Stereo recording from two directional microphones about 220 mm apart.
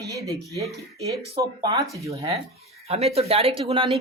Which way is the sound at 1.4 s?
15° right (ahead or behind).